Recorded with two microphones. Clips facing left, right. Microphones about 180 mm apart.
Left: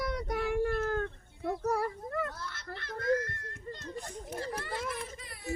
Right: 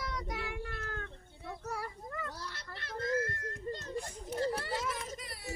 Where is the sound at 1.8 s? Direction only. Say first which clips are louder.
Left 8 dB; 65° left (ahead or behind).